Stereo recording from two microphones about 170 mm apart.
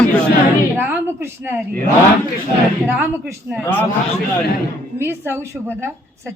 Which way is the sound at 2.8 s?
10° right (ahead or behind).